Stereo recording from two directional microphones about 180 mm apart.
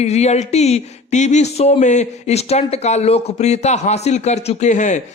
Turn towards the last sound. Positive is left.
turn(degrees=40)  # may be behind; listen again after turning